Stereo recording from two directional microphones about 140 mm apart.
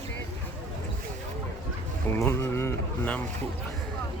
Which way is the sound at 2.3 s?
15° left (ahead or behind).